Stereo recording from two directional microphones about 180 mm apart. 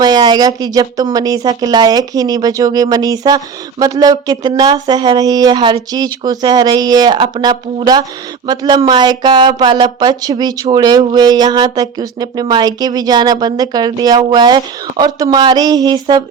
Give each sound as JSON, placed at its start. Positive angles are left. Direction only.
{"t": 0.0, "sound": "speech", "side_deg": -25}